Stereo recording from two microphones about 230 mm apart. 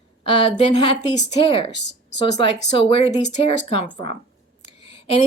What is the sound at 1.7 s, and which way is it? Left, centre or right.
Speech, left.